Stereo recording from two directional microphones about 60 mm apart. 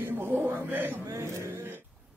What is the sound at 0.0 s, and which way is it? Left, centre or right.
A man's voice, right.